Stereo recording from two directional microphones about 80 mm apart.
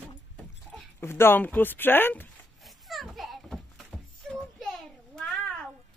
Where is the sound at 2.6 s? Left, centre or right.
Centre.